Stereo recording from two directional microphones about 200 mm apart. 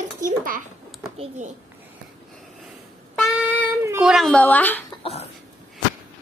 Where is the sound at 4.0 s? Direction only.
Centre (ahead or behind).